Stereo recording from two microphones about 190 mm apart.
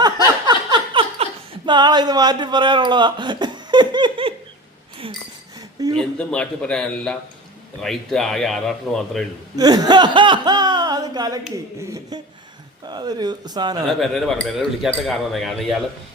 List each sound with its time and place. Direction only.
0.0 s a sound: 25° right (ahead or behind)
6.0 s speech: 5° left (ahead or behind)
9.6 s a man's voice: 20° right (ahead or behind)
13.8 s speech: centre (ahead or behind)